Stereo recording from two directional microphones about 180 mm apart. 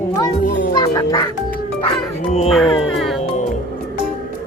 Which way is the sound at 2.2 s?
35° left (ahead or behind).